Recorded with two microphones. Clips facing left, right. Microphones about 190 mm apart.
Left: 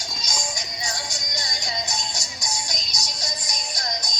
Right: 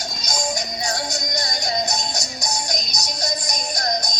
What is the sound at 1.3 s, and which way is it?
Music, 40° right (ahead or behind).